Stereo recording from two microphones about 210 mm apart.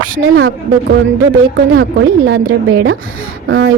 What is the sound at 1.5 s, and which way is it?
A woman's voice, 55° right (ahead or behind).